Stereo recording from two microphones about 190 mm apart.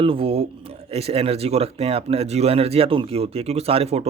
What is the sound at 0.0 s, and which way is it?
Speech, 30° right (ahead or behind).